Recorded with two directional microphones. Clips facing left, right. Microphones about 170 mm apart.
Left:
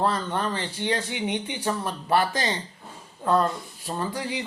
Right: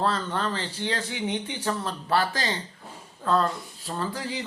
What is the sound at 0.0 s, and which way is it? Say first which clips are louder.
Speech: left 1 dB; 15° left (ahead or behind).